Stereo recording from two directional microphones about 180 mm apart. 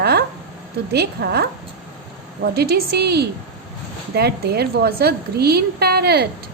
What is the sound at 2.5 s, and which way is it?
A woman's voice, 60° right (ahead or behind).